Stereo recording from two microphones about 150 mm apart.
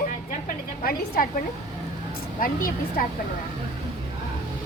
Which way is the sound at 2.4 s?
70° left (ahead or behind).